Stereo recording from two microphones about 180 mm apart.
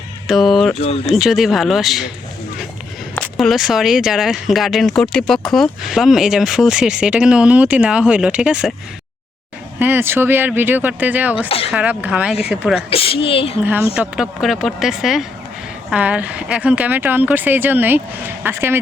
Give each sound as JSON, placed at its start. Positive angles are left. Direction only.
{"t": 0.3, "sound": "speech", "side_deg": 0}
{"t": 3.2, "sound": "speech", "side_deg": 0}
{"t": 9.7, "sound": "speech", "side_deg": -10}
{"t": 11.4, "sound": "a woman's voice", "side_deg": 30}
{"t": 11.7, "sound": "speech", "side_deg": -5}
{"t": 12.9, "sound": "a woman's voice", "side_deg": 30}
{"t": 13.9, "sound": "speech", "side_deg": -5}